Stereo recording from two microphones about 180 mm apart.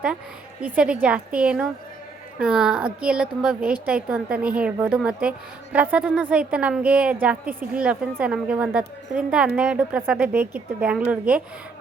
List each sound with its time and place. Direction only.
0.6 s a woman's voice: 5° right (ahead or behind)